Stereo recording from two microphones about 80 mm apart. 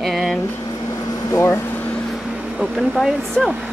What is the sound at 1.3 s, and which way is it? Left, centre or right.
Speech, left.